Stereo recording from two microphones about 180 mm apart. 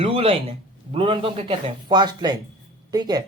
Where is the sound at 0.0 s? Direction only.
30° right (ahead or behind).